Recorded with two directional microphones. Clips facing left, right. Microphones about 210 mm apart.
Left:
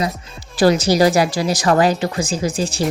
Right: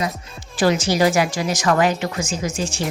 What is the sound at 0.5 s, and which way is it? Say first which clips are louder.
A woman's voice: left 4 dB; 35° left (ahead or behind).